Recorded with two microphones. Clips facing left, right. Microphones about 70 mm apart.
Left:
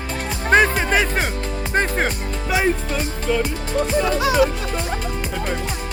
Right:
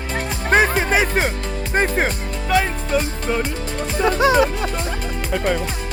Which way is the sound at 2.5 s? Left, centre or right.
Centre.